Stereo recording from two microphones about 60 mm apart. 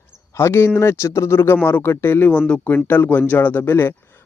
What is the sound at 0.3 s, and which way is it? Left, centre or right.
A man's voice, left.